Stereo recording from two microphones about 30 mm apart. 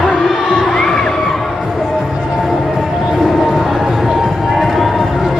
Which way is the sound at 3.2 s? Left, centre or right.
Centre.